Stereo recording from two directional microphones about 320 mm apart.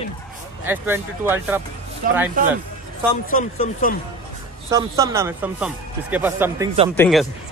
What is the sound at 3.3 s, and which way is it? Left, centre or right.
Speech, left.